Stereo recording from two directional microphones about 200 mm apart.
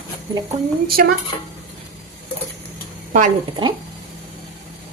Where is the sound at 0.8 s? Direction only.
50° right (ahead or behind).